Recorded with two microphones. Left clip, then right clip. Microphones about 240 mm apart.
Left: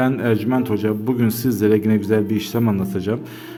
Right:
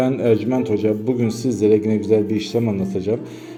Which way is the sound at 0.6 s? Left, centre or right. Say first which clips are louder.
Right 2 dB; left.